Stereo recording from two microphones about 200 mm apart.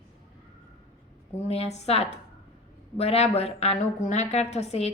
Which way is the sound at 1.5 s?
30° left (ahead or behind).